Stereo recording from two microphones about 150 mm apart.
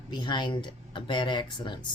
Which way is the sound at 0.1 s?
30° left (ahead or behind).